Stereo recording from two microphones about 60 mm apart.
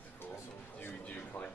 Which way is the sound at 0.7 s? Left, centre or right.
Left.